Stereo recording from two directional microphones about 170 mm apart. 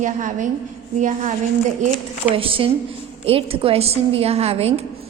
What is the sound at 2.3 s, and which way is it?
A woman's voice, 30° right (ahead or behind).